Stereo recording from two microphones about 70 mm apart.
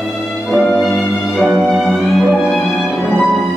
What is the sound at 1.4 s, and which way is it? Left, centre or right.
Music, centre.